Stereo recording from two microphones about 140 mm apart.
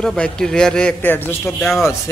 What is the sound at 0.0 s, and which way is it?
A man's voice, 5° left (ahead or behind).